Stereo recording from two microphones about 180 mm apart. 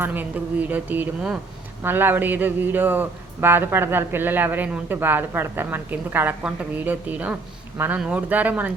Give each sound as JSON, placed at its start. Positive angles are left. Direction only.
{"t": 0.0, "sound": "a man's voice", "side_deg": -10}